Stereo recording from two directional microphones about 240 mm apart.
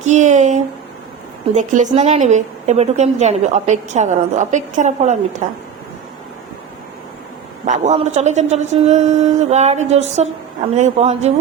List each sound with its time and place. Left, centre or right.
0.0 s a sound: right
1.5 s a woman's voice: right
7.6 s a woman's voice: right